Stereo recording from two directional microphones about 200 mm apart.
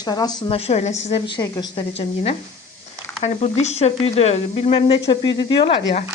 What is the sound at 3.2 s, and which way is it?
A woman's voice, 35° left (ahead or behind).